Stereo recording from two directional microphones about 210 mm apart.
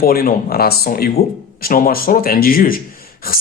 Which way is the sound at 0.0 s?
45° left (ahead or behind).